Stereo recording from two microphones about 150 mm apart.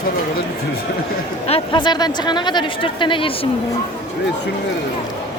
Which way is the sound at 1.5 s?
30° left (ahead or behind).